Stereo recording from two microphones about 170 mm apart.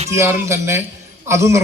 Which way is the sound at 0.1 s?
15° right (ahead or behind).